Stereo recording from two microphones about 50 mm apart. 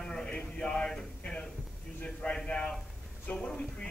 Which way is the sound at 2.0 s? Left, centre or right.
Centre.